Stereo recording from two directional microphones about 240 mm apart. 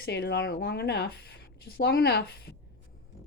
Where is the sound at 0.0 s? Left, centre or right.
Left.